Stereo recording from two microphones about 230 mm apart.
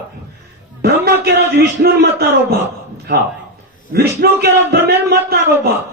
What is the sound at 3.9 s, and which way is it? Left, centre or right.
A man's voice, right.